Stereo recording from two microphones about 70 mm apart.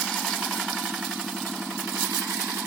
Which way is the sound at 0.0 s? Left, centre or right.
Centre.